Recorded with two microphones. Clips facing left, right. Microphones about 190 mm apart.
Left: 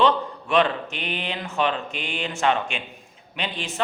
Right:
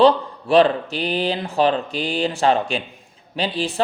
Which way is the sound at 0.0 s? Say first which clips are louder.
Right 6 dB; 35° right (ahead or behind).